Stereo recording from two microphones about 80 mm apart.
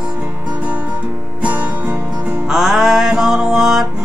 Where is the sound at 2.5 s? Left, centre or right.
Centre.